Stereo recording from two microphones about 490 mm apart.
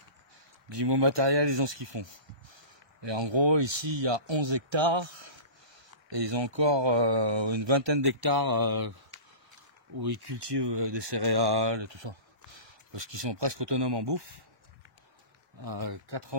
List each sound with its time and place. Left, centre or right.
0.7 s speech: right
15.6 s speech: right